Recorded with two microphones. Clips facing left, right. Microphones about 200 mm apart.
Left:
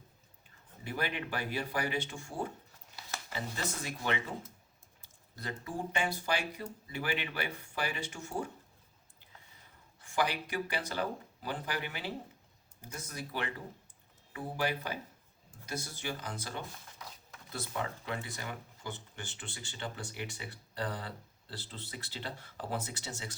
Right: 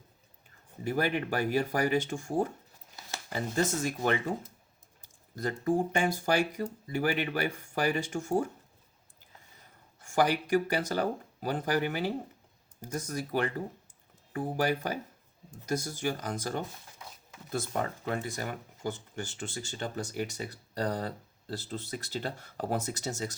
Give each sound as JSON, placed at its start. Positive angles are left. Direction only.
{"t": 0.9, "sound": "speech", "side_deg": -45}
{"t": 10.0, "sound": "speech", "side_deg": -45}